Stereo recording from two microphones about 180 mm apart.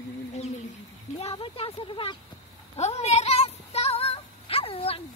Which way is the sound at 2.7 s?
35° left (ahead or behind).